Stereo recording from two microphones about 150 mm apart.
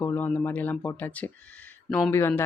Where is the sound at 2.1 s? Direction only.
15° left (ahead or behind).